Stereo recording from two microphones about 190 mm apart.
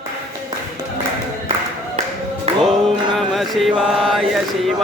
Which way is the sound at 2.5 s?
30° right (ahead or behind).